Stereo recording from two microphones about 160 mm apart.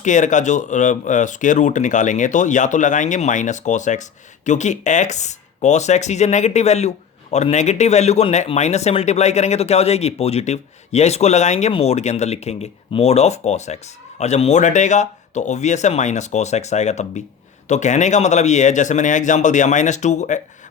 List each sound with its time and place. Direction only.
0.0 s speech: 50° left (ahead or behind)